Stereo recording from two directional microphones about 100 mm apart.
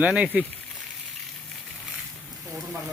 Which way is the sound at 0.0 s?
10° right (ahead or behind).